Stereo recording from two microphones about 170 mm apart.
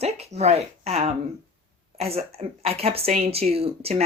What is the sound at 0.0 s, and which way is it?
Speech, 40° right (ahead or behind).